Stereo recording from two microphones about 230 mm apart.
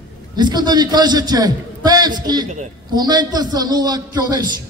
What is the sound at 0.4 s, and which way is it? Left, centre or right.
A man's voice, centre.